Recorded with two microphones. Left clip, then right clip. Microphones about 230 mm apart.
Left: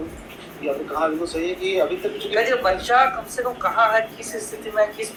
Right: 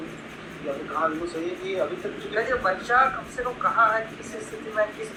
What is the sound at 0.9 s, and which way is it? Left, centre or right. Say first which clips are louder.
Speech: left 2 dB; left.